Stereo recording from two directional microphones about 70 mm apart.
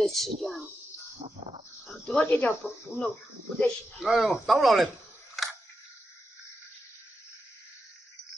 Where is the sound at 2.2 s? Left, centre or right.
Left.